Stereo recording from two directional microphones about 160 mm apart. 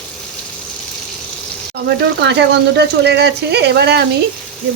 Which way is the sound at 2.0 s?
90° right.